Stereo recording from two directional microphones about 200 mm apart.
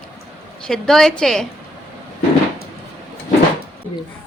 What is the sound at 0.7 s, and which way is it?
Speech, 5° left (ahead or behind).